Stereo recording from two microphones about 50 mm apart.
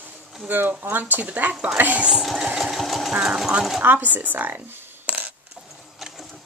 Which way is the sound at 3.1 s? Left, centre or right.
Centre.